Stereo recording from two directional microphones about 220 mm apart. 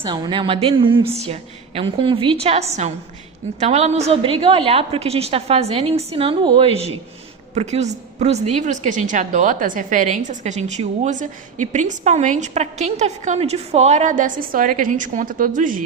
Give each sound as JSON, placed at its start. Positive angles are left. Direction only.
{"t": 0.0, "sound": "a woman's voice", "side_deg": -20}